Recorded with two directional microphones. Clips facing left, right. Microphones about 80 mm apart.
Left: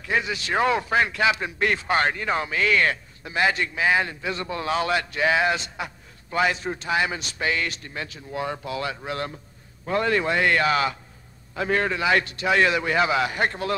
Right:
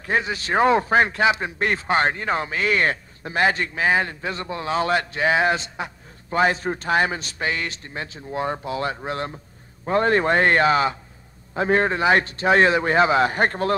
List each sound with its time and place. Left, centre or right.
0.0 s a man's voice: right